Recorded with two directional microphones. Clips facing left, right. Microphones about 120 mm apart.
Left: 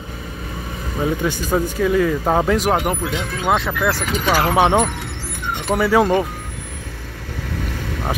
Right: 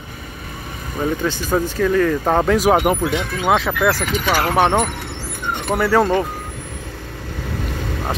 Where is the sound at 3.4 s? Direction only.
5° right (ahead or behind).